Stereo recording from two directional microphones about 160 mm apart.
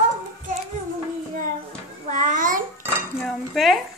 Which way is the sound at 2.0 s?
55° right (ahead or behind).